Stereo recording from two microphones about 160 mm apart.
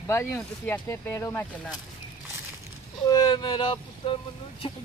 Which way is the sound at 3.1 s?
25° left (ahead or behind).